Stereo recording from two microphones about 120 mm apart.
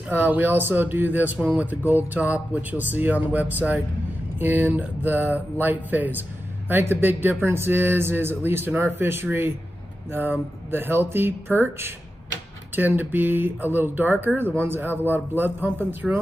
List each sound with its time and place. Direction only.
0.1 s speech: 15° right (ahead or behind)
10.7 s speech: 20° right (ahead or behind)